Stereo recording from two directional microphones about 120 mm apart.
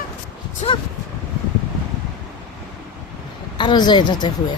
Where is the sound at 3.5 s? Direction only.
40° left (ahead or behind).